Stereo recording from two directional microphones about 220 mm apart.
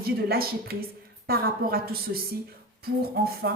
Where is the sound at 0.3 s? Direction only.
45° right (ahead or behind).